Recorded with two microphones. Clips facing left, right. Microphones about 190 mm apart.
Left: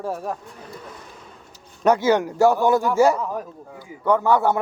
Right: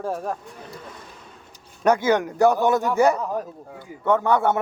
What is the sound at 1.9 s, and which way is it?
Speech, 50° right (ahead or behind).